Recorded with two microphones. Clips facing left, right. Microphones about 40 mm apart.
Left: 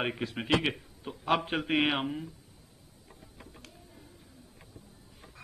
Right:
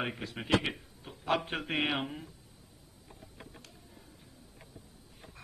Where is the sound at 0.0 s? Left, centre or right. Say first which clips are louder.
Left 4 dB; centre.